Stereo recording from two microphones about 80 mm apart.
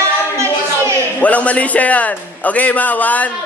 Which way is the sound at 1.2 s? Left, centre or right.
Centre.